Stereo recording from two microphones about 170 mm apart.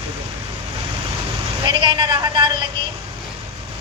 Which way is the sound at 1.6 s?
30° right (ahead or behind).